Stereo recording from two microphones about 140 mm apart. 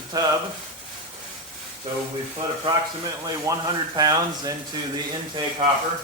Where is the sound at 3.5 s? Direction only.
20° right (ahead or behind).